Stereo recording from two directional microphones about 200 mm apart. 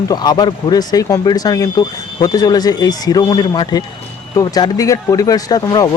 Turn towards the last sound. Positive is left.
turn(degrees=20)  # may be behind; listen again after turning